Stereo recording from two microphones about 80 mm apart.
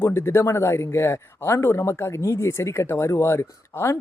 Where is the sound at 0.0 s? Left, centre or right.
Left.